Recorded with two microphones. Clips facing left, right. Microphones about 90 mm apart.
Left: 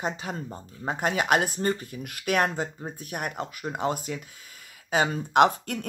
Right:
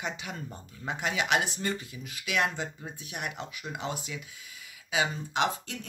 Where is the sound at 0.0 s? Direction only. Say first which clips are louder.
Left 5 dB; 40° left (ahead or behind).